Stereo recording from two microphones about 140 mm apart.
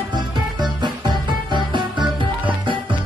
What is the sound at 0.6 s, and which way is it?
Music, 30° right (ahead or behind).